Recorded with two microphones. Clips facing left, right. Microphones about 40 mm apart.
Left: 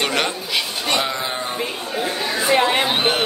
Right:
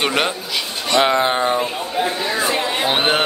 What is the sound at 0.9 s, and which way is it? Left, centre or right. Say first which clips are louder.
Speech: right 9 dB; right.